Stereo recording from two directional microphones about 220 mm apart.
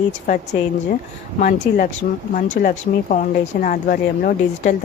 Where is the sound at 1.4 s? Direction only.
35° left (ahead or behind).